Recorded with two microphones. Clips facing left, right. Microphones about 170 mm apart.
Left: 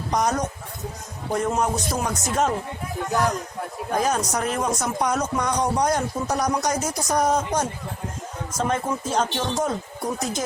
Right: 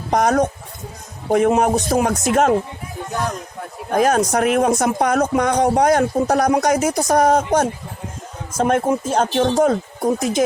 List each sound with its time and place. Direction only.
0.1 s speech: 65° right (ahead or behind)
3.9 s speech: 70° right (ahead or behind)
10.2 s speech: 80° right